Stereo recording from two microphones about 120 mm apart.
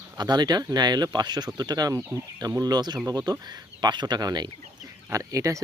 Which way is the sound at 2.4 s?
30° right (ahead or behind).